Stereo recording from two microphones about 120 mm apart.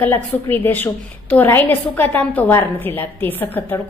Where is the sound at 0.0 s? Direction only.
15° left (ahead or behind).